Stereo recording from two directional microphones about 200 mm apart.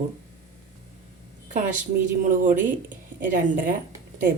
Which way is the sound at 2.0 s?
40° right (ahead or behind).